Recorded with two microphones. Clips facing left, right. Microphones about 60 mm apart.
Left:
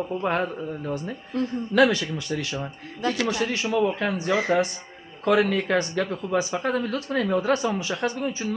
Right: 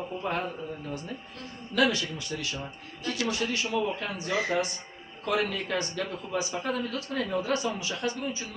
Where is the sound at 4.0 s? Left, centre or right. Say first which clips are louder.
Left 6 dB; left.